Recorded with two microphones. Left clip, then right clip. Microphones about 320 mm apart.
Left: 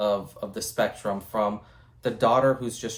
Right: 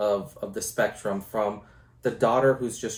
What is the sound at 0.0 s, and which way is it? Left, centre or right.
Speech, left.